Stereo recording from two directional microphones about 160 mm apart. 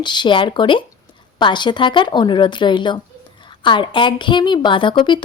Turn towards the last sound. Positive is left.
turn(degrees=30)  # may be behind; listen again after turning